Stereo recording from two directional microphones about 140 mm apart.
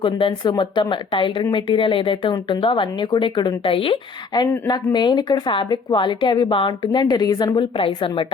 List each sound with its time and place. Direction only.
0.0 s a woman's voice: 35° left (ahead or behind)
4.4 s a woman's voice: 30° left (ahead or behind)